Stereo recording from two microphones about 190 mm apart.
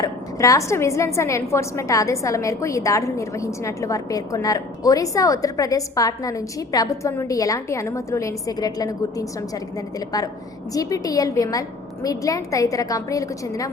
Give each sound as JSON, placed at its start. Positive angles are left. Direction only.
{"t": 0.0, "sound": "a woman's voice", "side_deg": 15}
{"t": 10.8, "sound": "a woman's voice", "side_deg": 20}